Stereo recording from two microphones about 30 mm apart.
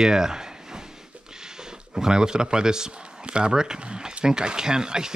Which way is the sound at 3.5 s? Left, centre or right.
Right.